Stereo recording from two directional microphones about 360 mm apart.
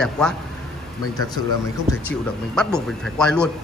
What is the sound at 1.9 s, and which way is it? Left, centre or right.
Speech, centre.